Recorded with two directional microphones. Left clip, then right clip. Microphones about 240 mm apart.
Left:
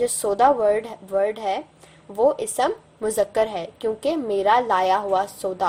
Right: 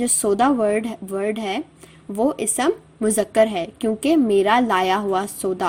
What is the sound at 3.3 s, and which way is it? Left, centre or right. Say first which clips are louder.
A woman's voice: right 5 dB; right.